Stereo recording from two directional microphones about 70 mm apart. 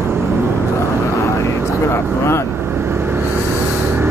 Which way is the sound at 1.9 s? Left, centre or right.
Left.